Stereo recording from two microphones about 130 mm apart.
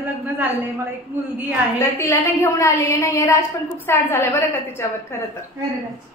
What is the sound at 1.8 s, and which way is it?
A woman's voice, 20° left (ahead or behind).